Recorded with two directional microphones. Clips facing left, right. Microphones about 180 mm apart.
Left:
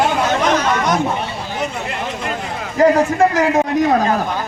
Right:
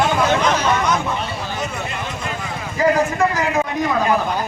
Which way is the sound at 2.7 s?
50° left (ahead or behind).